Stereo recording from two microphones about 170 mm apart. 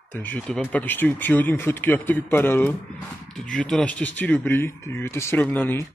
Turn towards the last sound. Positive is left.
turn(degrees=10)  # may be behind; listen again after turning